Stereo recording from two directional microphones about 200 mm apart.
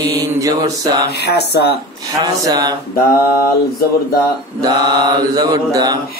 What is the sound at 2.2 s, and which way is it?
Mantra, 20° right (ahead or behind).